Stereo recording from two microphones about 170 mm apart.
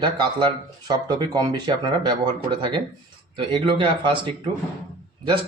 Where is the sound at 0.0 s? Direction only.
30° right (ahead or behind).